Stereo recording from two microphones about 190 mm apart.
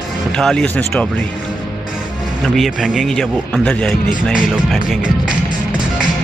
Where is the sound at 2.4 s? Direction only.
Centre (ahead or behind).